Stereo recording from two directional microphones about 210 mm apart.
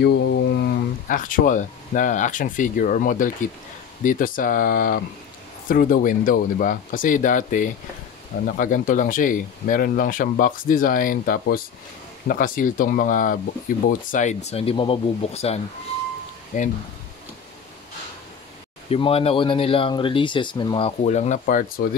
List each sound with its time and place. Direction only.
0.0 s speech: 55° left (ahead or behind); by 16.7 s 35° left (ahead or behind)
18.9 s speech: 25° left (ahead or behind)